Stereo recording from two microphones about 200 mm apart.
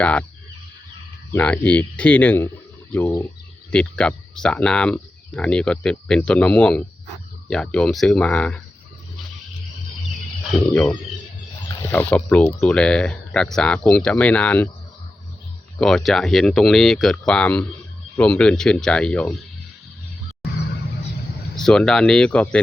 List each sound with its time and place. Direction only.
0.0 s speech: 5° left (ahead or behind)
1.3 s speech: 5° left (ahead or behind)
10.5 s speech: 5° left (ahead or behind)
15.8 s speech: centre (ahead or behind)
21.5 s speech: 5° left (ahead or behind)